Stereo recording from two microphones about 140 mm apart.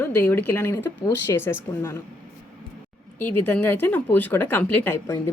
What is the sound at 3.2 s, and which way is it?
A woman's voice, 15° left (ahead or behind).